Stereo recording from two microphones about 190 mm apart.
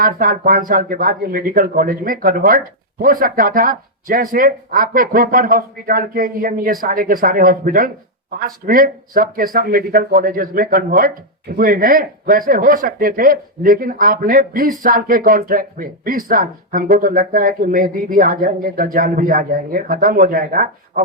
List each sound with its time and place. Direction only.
0.0 s speech: 45° right (ahead or behind)